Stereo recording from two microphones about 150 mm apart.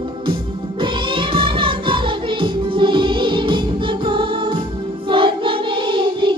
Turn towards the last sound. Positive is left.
turn(degrees=-35)  # may be behind; listen again after turning